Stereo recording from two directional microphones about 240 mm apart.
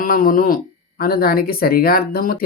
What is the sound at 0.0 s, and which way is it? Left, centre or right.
Speech, left.